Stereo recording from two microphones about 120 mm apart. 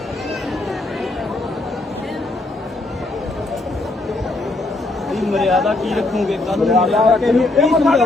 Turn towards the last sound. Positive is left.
turn(degrees=0)  # may be behind; listen again after turning